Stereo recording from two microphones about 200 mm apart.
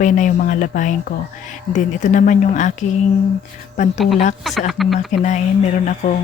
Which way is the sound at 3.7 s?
35° left (ahead or behind).